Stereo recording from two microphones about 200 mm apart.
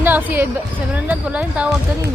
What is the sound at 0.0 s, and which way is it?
A woman's voice, 10° right (ahead or behind).